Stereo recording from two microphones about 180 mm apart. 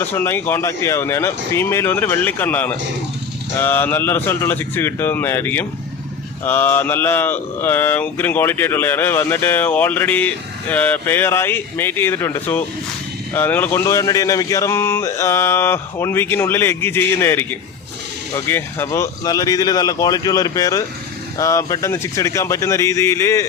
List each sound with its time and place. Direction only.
0.0 s speech: 10° left (ahead or behind)